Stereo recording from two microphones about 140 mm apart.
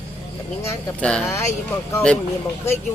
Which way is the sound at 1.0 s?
5° left (ahead or behind).